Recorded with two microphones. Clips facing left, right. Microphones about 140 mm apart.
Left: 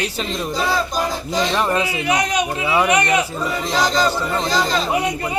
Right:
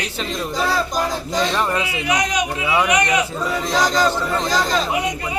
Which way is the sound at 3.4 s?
5° left (ahead or behind).